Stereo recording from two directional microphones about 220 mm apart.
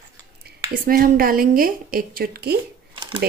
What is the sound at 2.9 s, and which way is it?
Shuffling cards, 25° right (ahead or behind).